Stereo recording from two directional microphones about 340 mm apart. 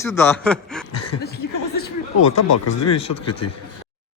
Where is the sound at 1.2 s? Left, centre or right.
Left.